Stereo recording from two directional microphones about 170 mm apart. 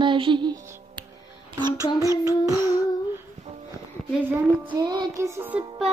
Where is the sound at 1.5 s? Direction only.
25° right (ahead or behind).